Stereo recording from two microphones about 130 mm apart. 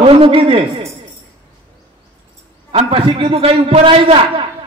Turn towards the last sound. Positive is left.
turn(degrees=-45)  # may be behind; listen again after turning